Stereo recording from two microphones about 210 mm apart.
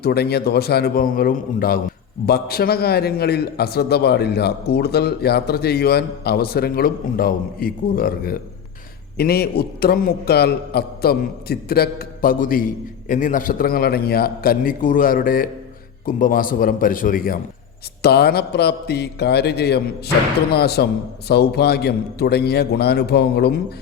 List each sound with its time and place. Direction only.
0.0 s a man's voice: 50° left (ahead or behind)